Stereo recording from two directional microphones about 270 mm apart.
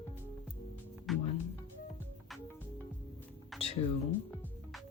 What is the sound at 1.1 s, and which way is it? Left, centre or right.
Music, centre.